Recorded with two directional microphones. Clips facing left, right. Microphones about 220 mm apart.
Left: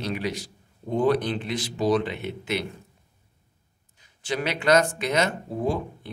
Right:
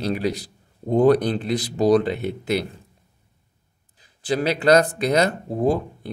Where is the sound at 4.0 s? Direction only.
35° right (ahead or behind).